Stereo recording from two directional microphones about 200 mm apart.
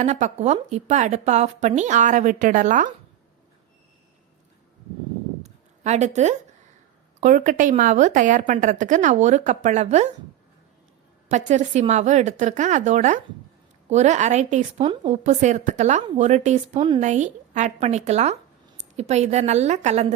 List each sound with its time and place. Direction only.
0.0 s a woman's voice: 35° right (ahead or behind)
5.4 s a sound: 35° right (ahead or behind)
7.2 s a woman's voice: 40° right (ahead or behind)
11.3 s a woman's voice: 35° right (ahead or behind)